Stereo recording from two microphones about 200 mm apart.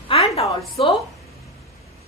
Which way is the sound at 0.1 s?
30° left (ahead or behind).